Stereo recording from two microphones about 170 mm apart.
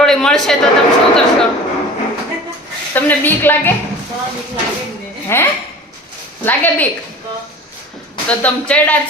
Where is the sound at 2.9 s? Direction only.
10° left (ahead or behind).